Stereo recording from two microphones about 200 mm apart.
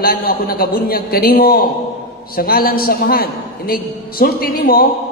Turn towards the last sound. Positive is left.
turn(degrees=50)  # may be behind; listen again after turning